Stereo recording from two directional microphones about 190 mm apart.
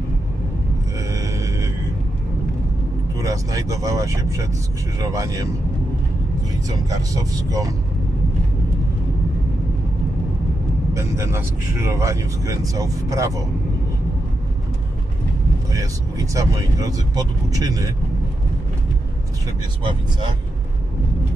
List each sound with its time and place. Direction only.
0.9 s a sound: 15° right (ahead or behind)
3.2 s a man's voice: 15° right (ahead or behind)
6.7 s speech: 20° right (ahead or behind)
10.9 s a man's voice: 15° right (ahead or behind)
15.7 s a man's voice: 15° right (ahead or behind)